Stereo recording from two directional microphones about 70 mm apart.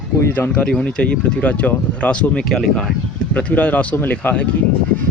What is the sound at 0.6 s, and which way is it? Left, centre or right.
Speech, centre.